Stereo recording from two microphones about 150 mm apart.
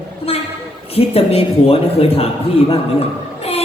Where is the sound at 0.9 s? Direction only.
40° left (ahead or behind).